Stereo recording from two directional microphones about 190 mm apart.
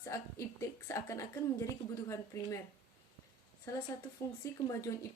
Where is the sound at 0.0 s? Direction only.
15° left (ahead or behind).